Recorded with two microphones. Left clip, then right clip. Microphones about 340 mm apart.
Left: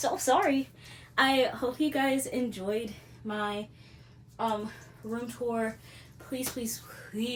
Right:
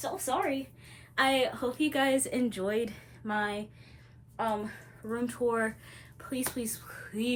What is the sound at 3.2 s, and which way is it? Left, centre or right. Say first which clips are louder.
Speech: right 4 dB; right.